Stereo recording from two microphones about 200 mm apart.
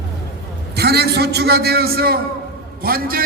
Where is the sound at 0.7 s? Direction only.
55° right (ahead or behind).